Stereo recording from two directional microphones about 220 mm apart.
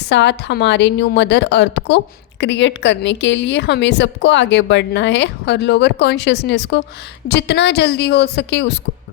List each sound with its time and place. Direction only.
0.1 s a woman's voice: 50° left (ahead or behind)